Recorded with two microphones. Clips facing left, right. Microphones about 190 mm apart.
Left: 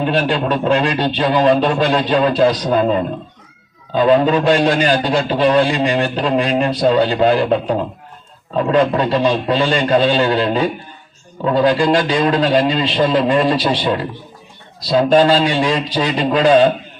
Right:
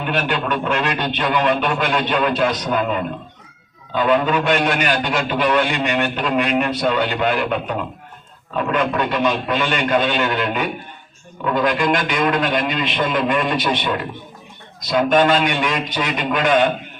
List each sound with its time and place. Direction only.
0.0 s a man's voice: 30° left (ahead or behind)